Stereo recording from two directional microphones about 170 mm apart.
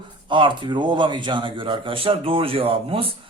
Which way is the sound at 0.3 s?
30° right (ahead or behind).